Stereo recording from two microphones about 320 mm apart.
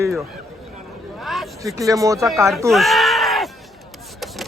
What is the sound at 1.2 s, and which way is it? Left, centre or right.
Speech, centre.